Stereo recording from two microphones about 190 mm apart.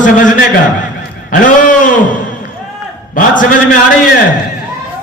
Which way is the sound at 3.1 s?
45° left (ahead or behind).